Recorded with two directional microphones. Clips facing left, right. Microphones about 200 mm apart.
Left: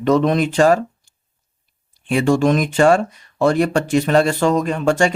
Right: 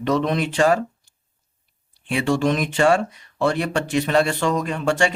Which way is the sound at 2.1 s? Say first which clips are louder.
Left 5 dB; 45° left (ahead or behind).